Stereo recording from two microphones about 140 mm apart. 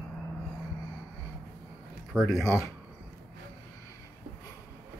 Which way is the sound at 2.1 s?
Centre (ahead or behind).